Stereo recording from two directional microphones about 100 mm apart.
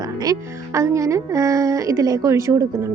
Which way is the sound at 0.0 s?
35° right (ahead or behind).